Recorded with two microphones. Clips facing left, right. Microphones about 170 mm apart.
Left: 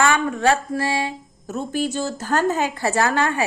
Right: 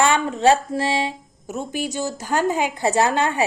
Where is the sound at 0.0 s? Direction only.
25° right (ahead or behind).